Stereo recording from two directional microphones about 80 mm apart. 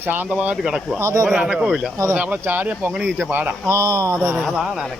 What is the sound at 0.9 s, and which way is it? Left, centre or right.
Speech, right.